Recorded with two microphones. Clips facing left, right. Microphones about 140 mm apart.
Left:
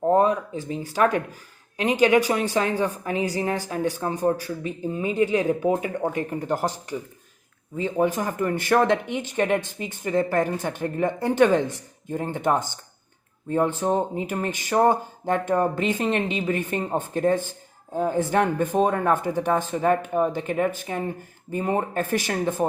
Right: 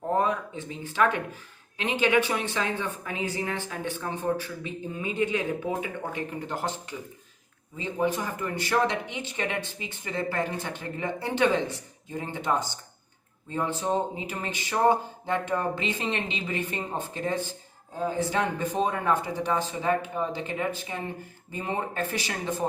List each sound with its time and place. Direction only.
0.2 s a woman's voice: 35° left (ahead or behind)
7.9 s speech: 45° left (ahead or behind)